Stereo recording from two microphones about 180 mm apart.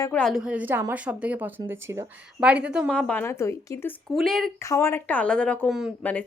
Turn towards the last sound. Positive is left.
turn(degrees=5)  # may be behind; listen again after turning